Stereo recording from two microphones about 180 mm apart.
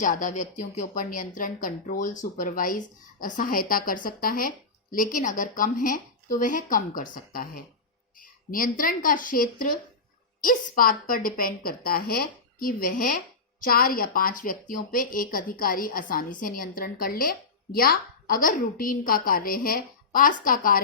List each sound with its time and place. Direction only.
0.0 s a woman's voice: 45° left (ahead or behind)